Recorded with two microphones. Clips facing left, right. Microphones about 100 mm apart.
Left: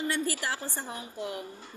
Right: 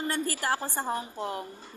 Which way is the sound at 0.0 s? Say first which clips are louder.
Right 1 dB; 40° right (ahead or behind).